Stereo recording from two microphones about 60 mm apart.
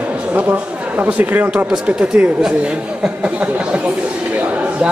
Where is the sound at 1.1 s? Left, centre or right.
Right.